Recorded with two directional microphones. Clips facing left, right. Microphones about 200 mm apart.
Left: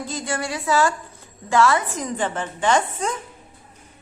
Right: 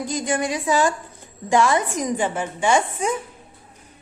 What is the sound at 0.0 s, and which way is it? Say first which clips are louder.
Speech: right 4 dB; 15° right (ahead or behind).